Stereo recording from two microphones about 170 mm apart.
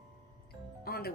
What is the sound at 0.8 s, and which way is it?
Music, 65° left (ahead or behind).